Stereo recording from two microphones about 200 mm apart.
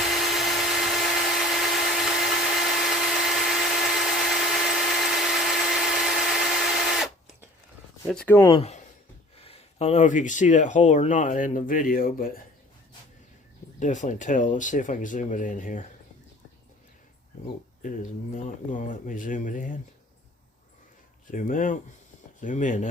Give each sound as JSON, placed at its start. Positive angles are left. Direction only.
{"t": 0.0, "sound": "tools", "side_deg": 0}
{"t": 8.1, "sound": "speech", "side_deg": 10}
{"t": 8.5, "sound": "speech", "side_deg": 30}
{"t": 13.7, "sound": "speech", "side_deg": 40}
{"t": 17.8, "sound": "speech", "side_deg": 40}
{"t": 21.2, "sound": "speech", "side_deg": 40}